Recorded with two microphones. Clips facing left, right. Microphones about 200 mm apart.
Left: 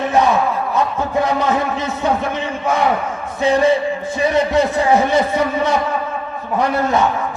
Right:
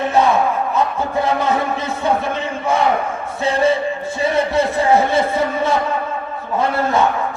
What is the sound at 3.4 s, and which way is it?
A man's voice, 15° left (ahead or behind).